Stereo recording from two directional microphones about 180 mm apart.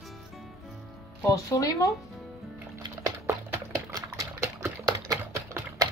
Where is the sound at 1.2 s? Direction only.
20° left (ahead or behind).